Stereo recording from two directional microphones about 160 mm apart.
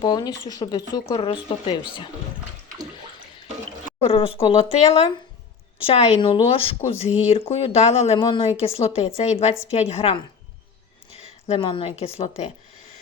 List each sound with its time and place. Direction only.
0.0 s speech: 25° left (ahead or behind)
4.0 s a woman's voice: 35° left (ahead or behind)
11.4 s a woman's voice: 35° left (ahead or behind)